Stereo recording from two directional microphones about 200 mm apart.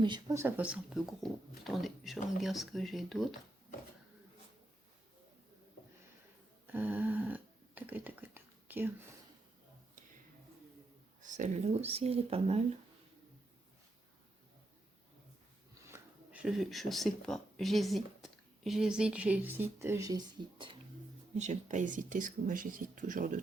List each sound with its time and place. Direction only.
0.0 s speech: 20° right (ahead or behind); by 3.2 s centre (ahead or behind)
6.7 s a sound: 10° right (ahead or behind)
11.2 s speech: 40° right (ahead or behind)
15.9 s speech: 5° right (ahead or behind); by 20.7 s 20° right (ahead or behind)
21.3 s speech: 35° right (ahead or behind)